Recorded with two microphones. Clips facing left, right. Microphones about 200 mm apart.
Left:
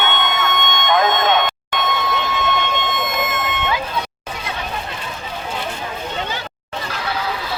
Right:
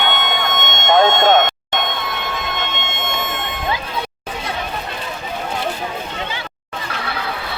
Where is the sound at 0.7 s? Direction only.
25° right (ahead or behind).